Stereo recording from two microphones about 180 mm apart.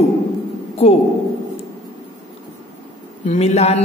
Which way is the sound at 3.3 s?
40° left (ahead or behind).